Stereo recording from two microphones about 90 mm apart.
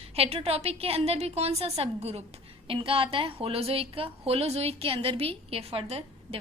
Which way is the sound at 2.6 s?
85° right.